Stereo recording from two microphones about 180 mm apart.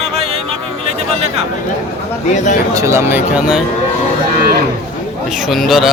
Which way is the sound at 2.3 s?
40° left (ahead or behind).